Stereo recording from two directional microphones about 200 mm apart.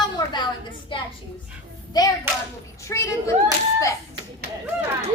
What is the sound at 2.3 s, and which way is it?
Hands, 10° right (ahead or behind).